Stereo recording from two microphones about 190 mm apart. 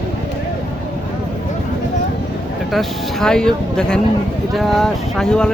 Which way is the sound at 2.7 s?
Centre (ahead or behind).